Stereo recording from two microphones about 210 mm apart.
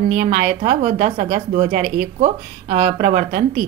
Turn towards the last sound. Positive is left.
turn(degrees=-40)  # may be behind; listen again after turning